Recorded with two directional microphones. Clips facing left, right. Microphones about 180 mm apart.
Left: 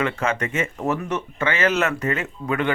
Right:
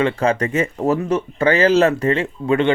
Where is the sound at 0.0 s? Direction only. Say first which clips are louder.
Right 6 dB; 30° right (ahead or behind).